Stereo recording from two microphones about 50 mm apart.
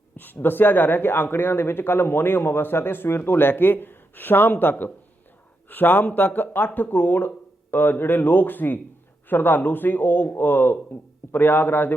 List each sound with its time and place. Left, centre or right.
0.3 s speech: left